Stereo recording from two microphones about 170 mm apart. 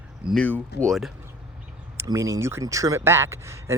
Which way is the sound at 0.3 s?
10° left (ahead or behind).